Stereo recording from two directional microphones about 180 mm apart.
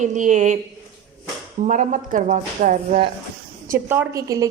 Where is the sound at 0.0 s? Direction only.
45° right (ahead or behind).